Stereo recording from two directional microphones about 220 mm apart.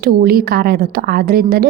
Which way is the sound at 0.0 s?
45° right (ahead or behind).